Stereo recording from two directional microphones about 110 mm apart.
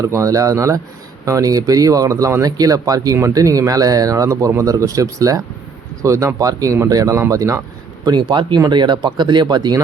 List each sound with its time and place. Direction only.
0.0 s speech: 30° right (ahead or behind)
8.0 s speech: 40° right (ahead or behind)